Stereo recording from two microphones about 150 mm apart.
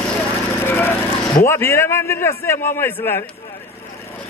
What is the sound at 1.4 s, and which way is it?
A man's voice, 15° left (ahead or behind).